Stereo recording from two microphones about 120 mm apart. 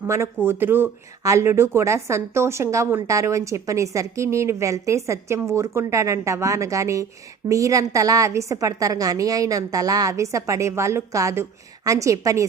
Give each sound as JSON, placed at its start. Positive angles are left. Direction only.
{"t": 0.4, "sound": "a woman's voice", "side_deg": -20}